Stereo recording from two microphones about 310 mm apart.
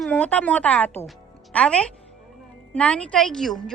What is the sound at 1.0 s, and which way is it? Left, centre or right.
Music, centre.